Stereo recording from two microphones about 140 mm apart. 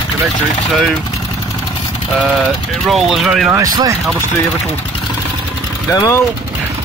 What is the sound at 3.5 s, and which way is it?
Speech, 25° right (ahead or behind).